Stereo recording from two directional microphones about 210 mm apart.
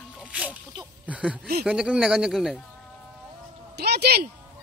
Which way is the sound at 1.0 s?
5° right (ahead or behind).